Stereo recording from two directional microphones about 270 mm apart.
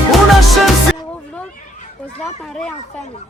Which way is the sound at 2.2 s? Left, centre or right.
Centre.